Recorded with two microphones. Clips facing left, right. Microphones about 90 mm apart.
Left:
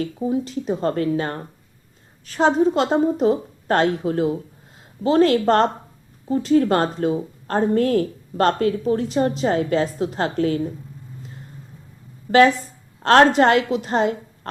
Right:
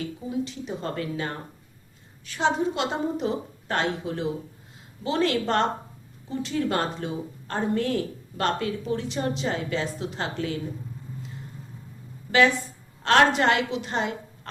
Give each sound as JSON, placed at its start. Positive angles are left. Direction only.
{"t": 0.0, "sound": "a woman's voice", "side_deg": 40}
{"t": 12.3, "sound": "a woman's voice", "side_deg": 45}